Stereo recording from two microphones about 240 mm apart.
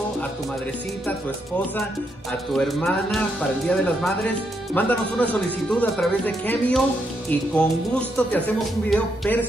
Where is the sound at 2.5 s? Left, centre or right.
Centre.